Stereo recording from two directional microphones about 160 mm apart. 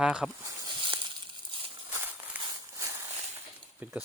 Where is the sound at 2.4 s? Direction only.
25° right (ahead or behind).